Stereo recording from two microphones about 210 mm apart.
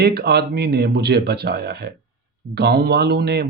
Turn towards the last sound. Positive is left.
turn(degrees=-50)  # may be behind; listen again after turning